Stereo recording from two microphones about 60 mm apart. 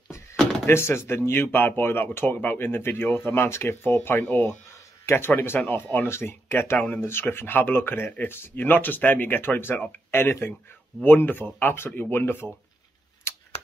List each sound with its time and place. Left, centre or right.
0.7 s speech: left
6.8 s speech: left
7.1 s speech: left
13.3 s a sound: left